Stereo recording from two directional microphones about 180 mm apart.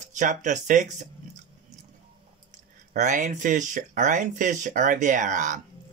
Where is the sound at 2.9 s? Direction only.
45° right (ahead or behind).